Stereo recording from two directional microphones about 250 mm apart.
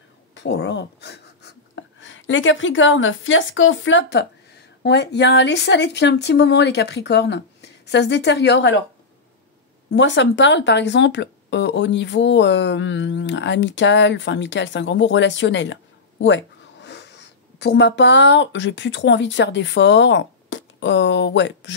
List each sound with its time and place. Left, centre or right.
0.3 s speech: left
9.9 s speech: left